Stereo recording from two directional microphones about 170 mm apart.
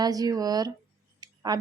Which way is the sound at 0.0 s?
20° right (ahead or behind).